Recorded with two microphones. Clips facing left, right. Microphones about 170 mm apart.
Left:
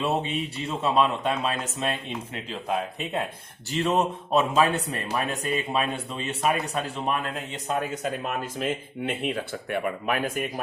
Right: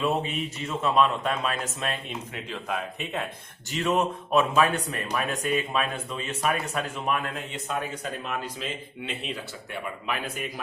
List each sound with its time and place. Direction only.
0.0 s speech: 30° left (ahead or behind); by 10.4 s 55° left (ahead or behind)